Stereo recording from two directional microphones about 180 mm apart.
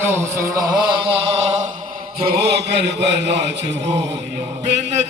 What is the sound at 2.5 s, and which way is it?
A man's voice, 70° right (ahead or behind).